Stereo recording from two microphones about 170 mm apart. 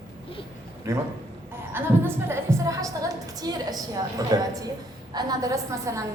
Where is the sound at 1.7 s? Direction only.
15° right (ahead or behind).